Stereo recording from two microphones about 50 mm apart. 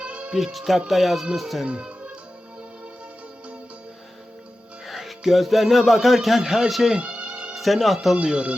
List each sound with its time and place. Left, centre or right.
0.0 s music: right
0.3 s speech: centre
1.6 s music: right
4.9 s speech: centre
7.0 s music: right
7.5 s speech: centre
8.1 s speech: centre